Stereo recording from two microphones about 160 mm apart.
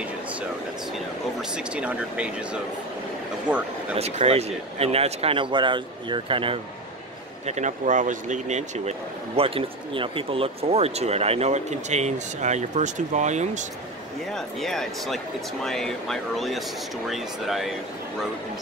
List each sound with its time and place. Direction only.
0.9 s speech: 5° right (ahead or behind)
4.0 s speech: 40° right (ahead or behind)
7.4 s speech: 45° right (ahead or behind)
14.3 s speech: 5° left (ahead or behind)